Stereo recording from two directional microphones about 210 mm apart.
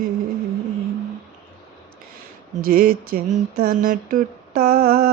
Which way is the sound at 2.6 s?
45° right (ahead or behind).